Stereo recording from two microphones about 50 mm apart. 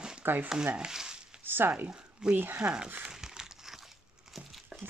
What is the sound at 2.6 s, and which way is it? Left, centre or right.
Speech, right.